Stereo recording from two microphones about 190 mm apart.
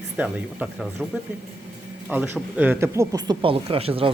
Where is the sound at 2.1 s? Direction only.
10° right (ahead or behind).